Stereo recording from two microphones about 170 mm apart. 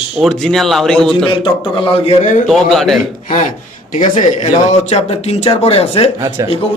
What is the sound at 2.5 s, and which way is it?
Speech, centre (ahead or behind).